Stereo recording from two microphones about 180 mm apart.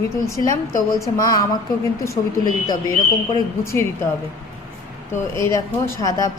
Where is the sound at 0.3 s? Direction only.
15° left (ahead or behind).